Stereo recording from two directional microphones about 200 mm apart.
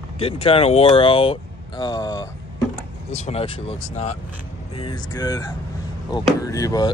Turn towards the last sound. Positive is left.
turn(degrees=15)  # may be behind; listen again after turning